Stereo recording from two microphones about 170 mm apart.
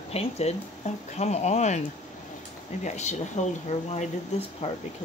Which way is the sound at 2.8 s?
45° left (ahead or behind).